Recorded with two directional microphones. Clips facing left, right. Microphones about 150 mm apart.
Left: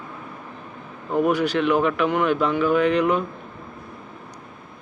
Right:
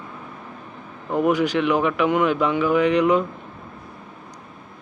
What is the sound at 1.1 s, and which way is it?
A man's voice, 15° right (ahead or behind).